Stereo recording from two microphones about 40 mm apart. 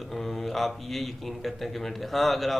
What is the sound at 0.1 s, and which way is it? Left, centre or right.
Speech, centre.